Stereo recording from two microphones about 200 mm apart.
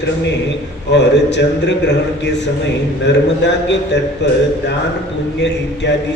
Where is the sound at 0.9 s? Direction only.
60° left (ahead or behind).